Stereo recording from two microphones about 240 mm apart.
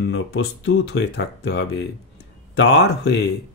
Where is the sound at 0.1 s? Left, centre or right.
Left.